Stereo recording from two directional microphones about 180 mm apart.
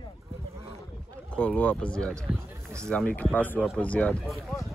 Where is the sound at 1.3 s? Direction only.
10° left (ahead or behind).